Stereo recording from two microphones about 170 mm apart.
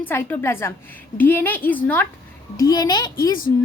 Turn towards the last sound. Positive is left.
turn(degrees=25)  # may be behind; listen again after turning